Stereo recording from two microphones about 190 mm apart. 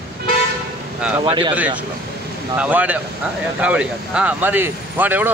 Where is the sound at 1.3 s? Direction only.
30° right (ahead or behind).